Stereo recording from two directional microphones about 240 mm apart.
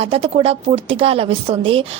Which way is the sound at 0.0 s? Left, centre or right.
Right.